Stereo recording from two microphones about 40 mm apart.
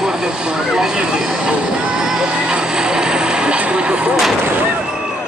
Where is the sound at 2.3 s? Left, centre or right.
Right.